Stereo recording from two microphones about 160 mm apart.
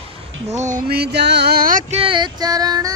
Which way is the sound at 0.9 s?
90° right.